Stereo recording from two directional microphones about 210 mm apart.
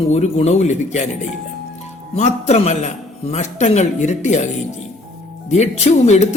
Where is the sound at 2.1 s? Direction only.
30° left (ahead or behind).